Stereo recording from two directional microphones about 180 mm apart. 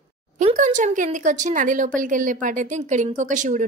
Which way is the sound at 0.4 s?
45° right (ahead or behind).